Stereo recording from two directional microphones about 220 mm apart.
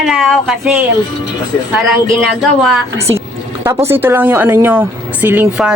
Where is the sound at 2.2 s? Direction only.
Centre (ahead or behind).